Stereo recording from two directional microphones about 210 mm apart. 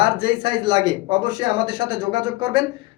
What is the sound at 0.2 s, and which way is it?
Speech, 20° right (ahead or behind).